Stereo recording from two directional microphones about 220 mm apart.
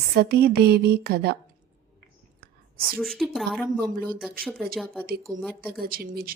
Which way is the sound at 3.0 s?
Centre (ahead or behind).